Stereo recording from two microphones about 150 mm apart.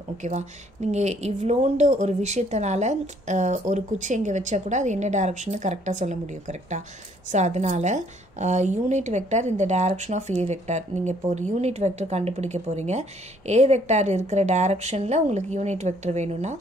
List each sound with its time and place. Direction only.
0.2 s speech: 50° right (ahead or behind)